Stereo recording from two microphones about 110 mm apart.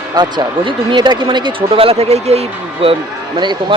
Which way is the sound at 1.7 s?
60° right (ahead or behind).